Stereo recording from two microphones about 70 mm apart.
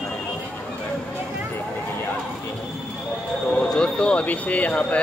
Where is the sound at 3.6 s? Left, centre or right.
Centre.